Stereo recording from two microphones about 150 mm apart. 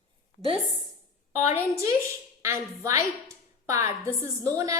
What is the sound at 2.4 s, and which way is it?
Speech, 20° right (ahead or behind).